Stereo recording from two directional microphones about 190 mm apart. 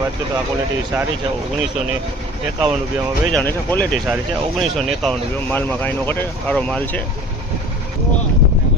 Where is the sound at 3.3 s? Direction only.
10° left (ahead or behind).